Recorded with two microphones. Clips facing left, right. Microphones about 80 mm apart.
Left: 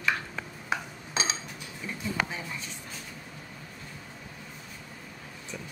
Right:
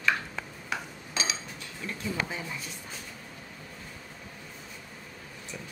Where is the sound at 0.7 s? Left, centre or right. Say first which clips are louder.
Left 5 dB; left.